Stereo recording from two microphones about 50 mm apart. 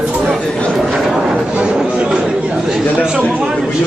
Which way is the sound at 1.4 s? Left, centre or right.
Right.